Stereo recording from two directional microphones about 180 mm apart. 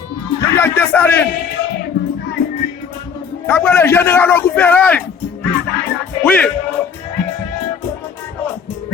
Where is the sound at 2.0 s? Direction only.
70° left (ahead or behind).